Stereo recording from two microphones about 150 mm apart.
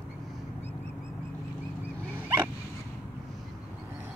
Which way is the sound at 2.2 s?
15° right (ahead or behind).